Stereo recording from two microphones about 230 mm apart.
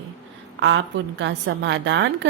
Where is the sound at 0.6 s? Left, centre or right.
Right.